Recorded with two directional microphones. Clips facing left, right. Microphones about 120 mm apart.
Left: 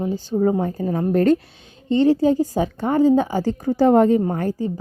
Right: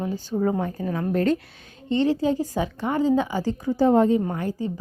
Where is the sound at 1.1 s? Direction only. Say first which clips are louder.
Left 6 dB; 45° left (ahead or behind); by 4.2 s 60° left (ahead or behind).